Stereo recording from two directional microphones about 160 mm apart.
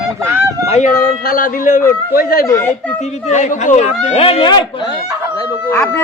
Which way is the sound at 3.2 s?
45° left (ahead or behind).